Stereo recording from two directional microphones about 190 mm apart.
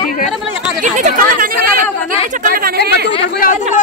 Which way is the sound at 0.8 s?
40° right (ahead or behind).